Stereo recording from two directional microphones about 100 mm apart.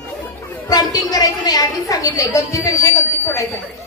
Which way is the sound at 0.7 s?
40° left (ahead or behind).